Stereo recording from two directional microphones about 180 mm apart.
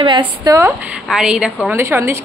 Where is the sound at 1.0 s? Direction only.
5° right (ahead or behind).